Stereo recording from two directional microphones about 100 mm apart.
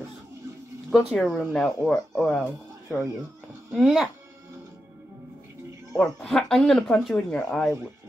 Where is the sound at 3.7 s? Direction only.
Centre (ahead or behind).